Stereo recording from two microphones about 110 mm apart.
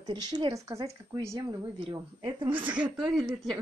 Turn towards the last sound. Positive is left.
turn(degrees=0)  # may be behind; listen again after turning